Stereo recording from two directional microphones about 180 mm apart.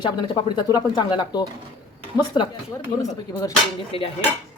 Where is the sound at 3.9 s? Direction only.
30° left (ahead or behind).